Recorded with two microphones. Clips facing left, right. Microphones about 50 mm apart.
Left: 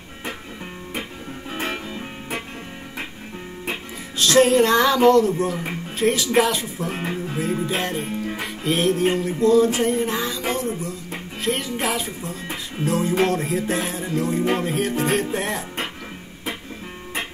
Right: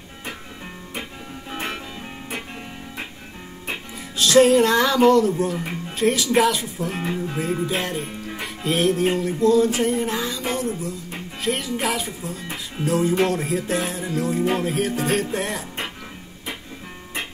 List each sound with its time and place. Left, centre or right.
4.2 s speech: centre